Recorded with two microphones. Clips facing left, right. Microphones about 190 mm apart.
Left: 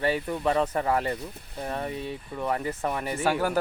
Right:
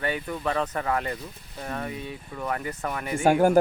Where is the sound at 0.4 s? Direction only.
10° left (ahead or behind).